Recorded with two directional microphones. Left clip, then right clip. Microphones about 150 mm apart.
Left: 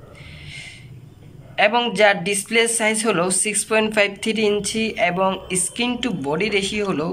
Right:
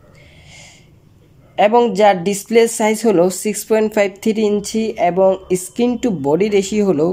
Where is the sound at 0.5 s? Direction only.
45° right (ahead or behind).